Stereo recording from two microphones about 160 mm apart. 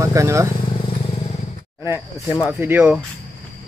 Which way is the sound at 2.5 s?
15° right (ahead or behind).